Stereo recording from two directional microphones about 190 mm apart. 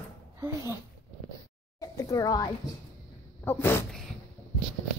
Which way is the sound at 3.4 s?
10° left (ahead or behind).